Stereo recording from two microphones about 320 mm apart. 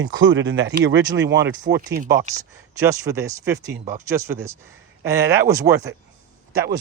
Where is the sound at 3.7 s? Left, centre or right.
Right.